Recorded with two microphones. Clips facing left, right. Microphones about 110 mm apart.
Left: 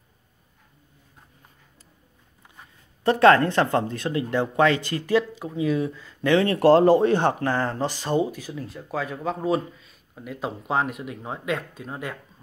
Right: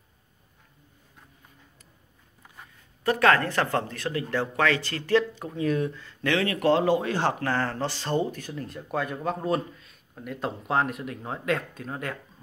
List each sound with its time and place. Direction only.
3.0 s speech: 25° left (ahead or behind); by 6.3 s 10° left (ahead or behind)
6.3 s speech: 30° left (ahead or behind)
7.1 s speech: 25° left (ahead or behind); by 12.2 s 10° left (ahead or behind)